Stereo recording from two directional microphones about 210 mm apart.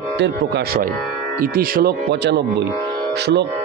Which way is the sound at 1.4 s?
45° right (ahead or behind).